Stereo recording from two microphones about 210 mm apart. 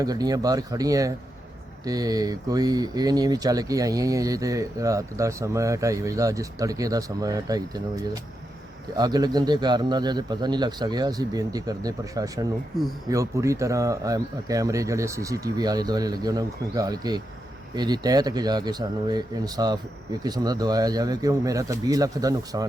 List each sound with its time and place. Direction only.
0.0 s a man's voice: 20° right (ahead or behind)